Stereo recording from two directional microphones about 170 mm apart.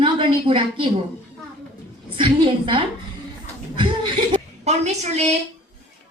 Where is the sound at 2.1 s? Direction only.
30° right (ahead or behind).